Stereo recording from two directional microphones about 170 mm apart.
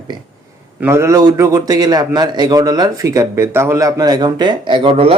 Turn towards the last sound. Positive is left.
turn(degrees=-30)  # may be behind; listen again after turning